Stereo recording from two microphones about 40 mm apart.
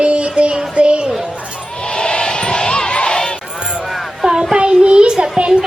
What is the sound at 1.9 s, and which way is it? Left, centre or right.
Crowd, left.